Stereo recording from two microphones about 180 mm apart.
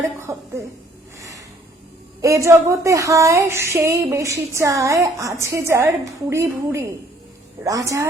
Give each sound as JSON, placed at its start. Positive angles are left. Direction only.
{"t": 0.3, "sound": "speech", "side_deg": -15}
{"t": 2.2, "sound": "speech", "side_deg": -15}